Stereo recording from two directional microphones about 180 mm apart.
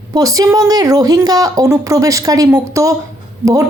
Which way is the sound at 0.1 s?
20° right (ahead or behind).